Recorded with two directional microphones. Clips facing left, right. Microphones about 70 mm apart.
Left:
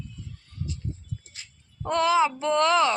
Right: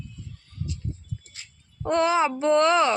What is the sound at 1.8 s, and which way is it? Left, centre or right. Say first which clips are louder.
Speech: even; right.